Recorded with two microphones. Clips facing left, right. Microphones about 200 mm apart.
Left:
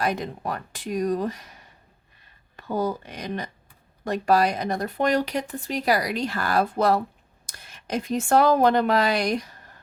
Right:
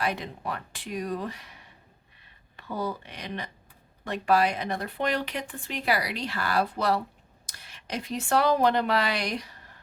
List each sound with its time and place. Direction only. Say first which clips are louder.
0.0 s speech: left 4 dB; 45° left (ahead or behind)